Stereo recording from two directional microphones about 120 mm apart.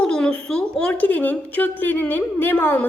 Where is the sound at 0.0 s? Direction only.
5° left (ahead or behind).